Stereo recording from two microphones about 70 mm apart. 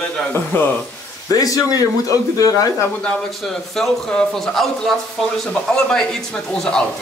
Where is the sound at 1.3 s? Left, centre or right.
Left.